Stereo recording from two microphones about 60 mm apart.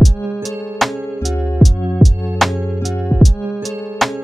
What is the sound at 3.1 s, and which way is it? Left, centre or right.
Music, left.